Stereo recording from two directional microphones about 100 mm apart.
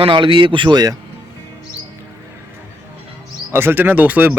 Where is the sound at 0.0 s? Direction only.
60° right (ahead or behind).